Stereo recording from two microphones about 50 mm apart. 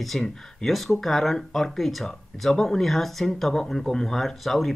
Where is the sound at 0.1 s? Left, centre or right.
Centre.